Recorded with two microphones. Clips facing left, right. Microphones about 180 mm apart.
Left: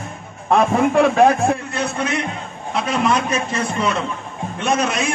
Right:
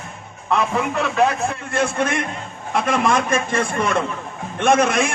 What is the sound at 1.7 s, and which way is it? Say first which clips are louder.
A man's voice: right 2 dB; 50° right (ahead or behind).